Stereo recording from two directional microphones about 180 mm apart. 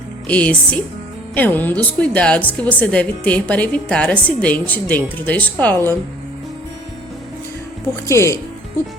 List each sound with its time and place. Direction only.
0.3 s a woman's voice: 5° left (ahead or behind)
8.0 s a woman's voice: 15° left (ahead or behind)